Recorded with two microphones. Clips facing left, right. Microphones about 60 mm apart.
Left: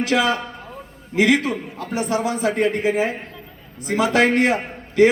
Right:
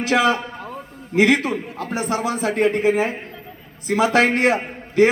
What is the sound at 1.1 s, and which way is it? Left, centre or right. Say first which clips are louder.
Speech: right 1 dB; right.